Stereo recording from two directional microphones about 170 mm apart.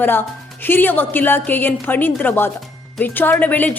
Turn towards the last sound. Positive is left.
turn(degrees=10)  # may be behind; listen again after turning